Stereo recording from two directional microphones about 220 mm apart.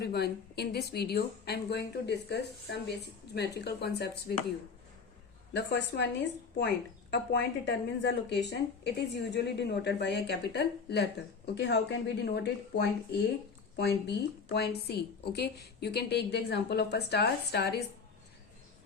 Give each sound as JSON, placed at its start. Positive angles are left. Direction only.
{"t": 0.0, "sound": "speech", "side_deg": 45}
{"t": 5.5, "sound": "speech", "side_deg": 55}
{"t": 7.1, "sound": "speech", "side_deg": 50}